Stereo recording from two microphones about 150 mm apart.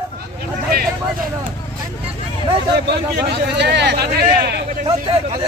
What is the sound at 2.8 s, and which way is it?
Speech, 90° right.